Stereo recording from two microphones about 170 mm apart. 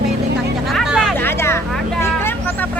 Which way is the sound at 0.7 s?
Centre (ahead or behind).